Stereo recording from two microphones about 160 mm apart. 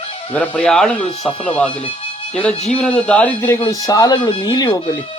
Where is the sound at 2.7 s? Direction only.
5° left (ahead or behind).